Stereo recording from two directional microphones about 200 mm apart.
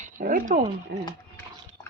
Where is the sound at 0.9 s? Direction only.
55° right (ahead or behind).